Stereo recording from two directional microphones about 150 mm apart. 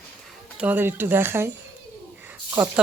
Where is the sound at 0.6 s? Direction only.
15° right (ahead or behind).